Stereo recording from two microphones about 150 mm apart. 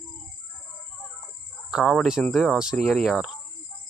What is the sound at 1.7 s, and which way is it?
Cricket, centre (ahead or behind).